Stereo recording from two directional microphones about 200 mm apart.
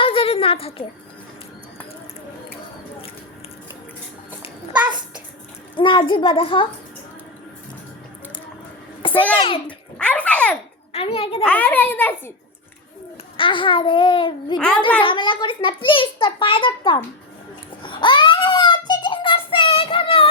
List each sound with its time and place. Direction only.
0.0 s a sound: 30° left (ahead or behind)
4.7 s a sound: 5° right (ahead or behind)
5.7 s a child's voice: 25° left (ahead or behind)
9.0 s babbling: 25° left (ahead or behind)
9.6 s bathtub: 5° left (ahead or behind)
10.9 s a child's voice: 30° left (ahead or behind)
11.4 s a child's voice: 10° left (ahead or behind)
13.3 s a child's voice: 25° left (ahead or behind)
17.8 s child singing: 25° left (ahead or behind)